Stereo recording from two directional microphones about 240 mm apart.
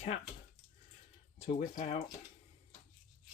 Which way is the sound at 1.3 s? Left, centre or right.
Left.